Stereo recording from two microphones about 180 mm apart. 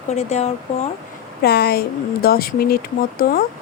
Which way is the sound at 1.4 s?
60° left (ahead or behind).